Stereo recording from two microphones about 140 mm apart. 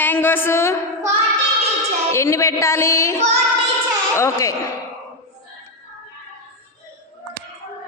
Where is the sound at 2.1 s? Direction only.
20° left (ahead or behind).